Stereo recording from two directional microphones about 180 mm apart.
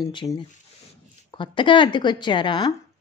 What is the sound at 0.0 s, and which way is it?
Speech, 25° left (ahead or behind).